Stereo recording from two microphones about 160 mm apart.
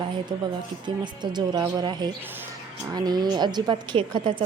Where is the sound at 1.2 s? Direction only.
25° right (ahead or behind).